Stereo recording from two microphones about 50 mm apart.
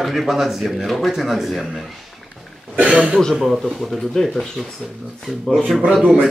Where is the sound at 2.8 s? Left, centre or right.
Right.